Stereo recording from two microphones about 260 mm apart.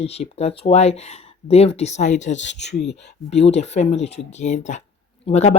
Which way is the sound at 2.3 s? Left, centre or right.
Left.